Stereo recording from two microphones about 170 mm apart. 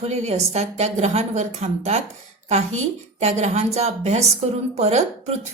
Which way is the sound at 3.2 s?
40° right (ahead or behind).